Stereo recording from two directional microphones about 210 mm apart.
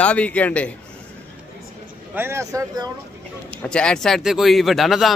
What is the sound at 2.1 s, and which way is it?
Speech, 10° right (ahead or behind).